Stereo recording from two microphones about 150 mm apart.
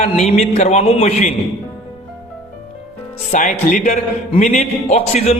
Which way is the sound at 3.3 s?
55° left (ahead or behind).